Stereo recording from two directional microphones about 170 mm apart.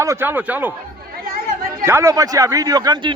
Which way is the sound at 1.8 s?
15° right (ahead or behind).